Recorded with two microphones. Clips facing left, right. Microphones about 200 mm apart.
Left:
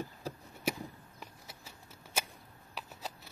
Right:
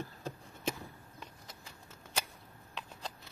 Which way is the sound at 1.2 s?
10° left (ahead or behind).